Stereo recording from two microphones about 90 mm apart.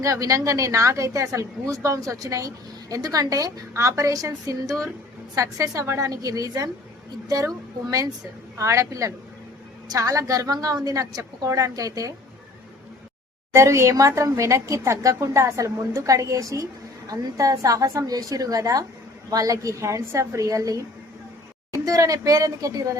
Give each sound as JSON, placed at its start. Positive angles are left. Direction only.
{"t": 0.0, "sound": "a woman's voice", "side_deg": -35}
{"t": 13.5, "sound": "a woman's voice", "side_deg": -30}
{"t": 21.8, "sound": "a woman's voice", "side_deg": -40}